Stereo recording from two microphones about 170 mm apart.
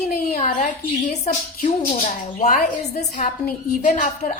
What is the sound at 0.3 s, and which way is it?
A woman's voice, 45° left (ahead or behind).